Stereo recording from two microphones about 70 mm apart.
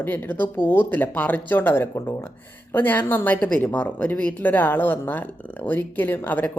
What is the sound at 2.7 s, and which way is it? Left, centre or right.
Speech, left.